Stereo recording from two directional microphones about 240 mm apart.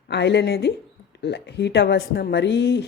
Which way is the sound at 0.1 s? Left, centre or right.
Left.